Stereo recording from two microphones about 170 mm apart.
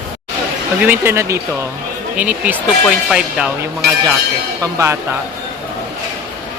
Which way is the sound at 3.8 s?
75° right (ahead or behind).